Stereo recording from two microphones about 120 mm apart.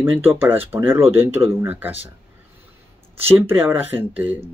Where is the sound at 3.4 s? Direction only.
20° right (ahead or behind).